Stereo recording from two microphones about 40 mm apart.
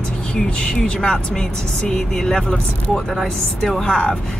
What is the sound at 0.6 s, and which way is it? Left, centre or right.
Speech, left.